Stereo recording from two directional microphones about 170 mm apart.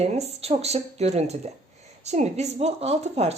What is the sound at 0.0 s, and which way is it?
A woman's voice, 40° right (ahead or behind).